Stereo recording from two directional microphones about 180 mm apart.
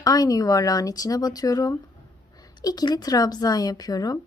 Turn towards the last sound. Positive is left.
turn(degrees=20)  # may be behind; listen again after turning